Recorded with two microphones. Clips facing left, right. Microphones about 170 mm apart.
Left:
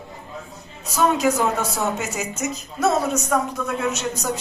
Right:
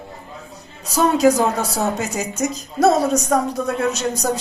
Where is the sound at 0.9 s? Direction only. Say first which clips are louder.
Right 4 dB; 35° right (ahead or behind).